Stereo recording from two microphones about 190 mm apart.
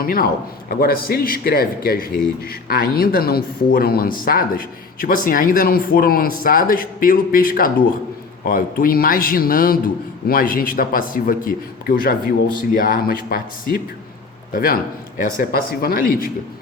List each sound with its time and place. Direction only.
0.0 s a man's voice: 50° left (ahead or behind)